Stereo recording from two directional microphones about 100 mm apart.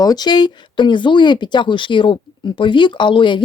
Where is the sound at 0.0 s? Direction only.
40° left (ahead or behind).